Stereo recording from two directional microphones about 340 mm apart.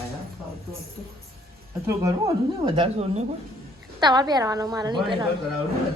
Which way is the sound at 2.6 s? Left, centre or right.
Centre.